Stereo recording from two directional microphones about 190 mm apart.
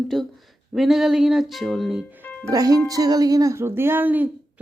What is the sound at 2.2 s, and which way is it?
Music, 10° left (ahead or behind).